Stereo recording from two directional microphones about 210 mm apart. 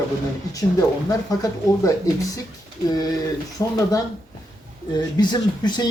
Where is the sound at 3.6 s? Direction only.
15° left (ahead or behind).